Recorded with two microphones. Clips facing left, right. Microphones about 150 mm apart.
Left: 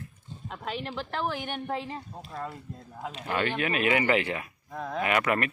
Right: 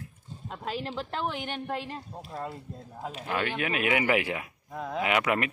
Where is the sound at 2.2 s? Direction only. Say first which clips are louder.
Right 2 dB; 15° right (ahead or behind).